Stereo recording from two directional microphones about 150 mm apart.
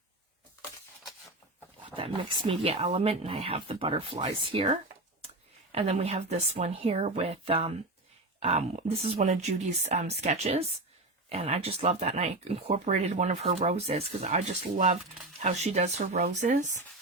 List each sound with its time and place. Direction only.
2.0 s speech: 35° right (ahead or behind); by 16.8 s 55° right (ahead or behind)